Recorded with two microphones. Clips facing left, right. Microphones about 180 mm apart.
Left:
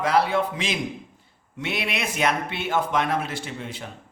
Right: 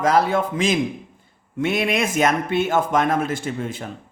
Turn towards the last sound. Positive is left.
turn(degrees=-50)  # may be behind; listen again after turning